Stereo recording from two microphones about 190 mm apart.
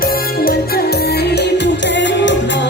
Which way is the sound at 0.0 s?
50° left (ahead or behind).